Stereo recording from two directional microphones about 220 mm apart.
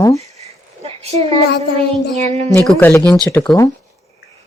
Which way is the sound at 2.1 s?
30° right (ahead or behind).